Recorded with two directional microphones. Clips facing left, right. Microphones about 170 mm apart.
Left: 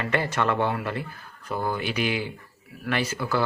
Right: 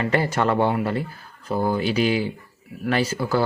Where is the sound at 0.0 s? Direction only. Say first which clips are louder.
Right 4 dB; 35° right (ahead or behind).